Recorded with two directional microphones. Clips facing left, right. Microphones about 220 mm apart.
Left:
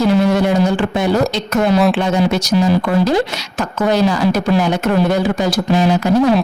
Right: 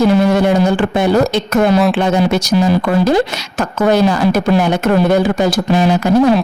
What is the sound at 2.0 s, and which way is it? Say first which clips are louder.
A woman's voice: right 2 dB; 55° right (ahead or behind).